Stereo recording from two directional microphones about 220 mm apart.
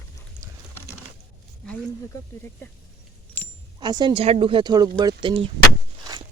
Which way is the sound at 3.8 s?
20° right (ahead or behind).